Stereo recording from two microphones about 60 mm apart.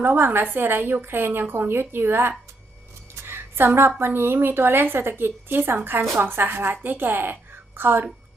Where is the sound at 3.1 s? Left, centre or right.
Right.